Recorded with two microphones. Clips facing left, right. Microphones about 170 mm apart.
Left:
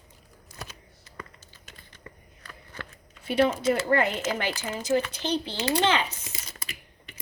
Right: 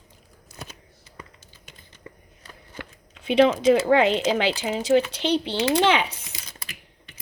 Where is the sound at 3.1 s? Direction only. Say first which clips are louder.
Right 5 dB; 85° right; by 6.1 s 65° right (ahead or behind).